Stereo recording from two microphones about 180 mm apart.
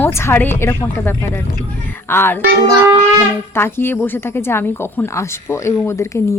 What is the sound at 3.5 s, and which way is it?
Speech, 10° left (ahead or behind).